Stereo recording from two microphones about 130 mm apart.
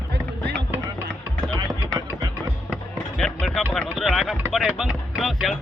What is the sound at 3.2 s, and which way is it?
Music, centre (ahead or behind).